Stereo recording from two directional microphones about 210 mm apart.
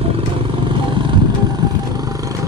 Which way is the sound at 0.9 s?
20° right (ahead or behind).